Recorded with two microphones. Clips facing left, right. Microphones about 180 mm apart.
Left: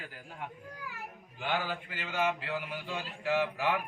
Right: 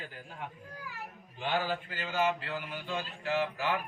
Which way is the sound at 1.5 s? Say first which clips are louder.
Right 3 dB; 15° left (ahead or behind).